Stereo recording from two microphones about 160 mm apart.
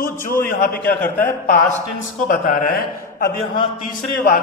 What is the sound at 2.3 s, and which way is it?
A woman's voice, 55° left (ahead or behind).